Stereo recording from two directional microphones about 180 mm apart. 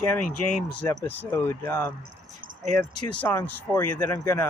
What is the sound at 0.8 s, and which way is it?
Speech, 10° left (ahead or behind).